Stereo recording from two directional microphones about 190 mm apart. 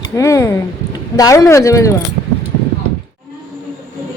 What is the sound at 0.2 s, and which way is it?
Speech, 15° left (ahead or behind).